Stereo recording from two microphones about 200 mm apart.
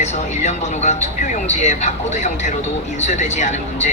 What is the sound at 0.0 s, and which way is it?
A woman's voice, 35° left (ahead or behind).